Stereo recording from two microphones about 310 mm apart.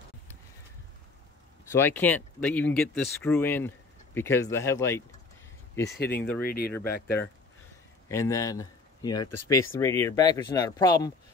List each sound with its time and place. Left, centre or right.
1.7 s speech: centre
5.9 s speech: left
8.1 s speech: centre
9.2 s speech: left
9.6 s speech: centre